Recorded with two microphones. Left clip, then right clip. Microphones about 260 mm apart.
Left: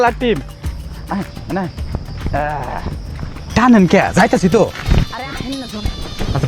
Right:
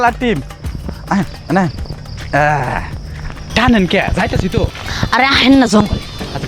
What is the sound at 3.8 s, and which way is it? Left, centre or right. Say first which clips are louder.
Speech: left 3 dB; left.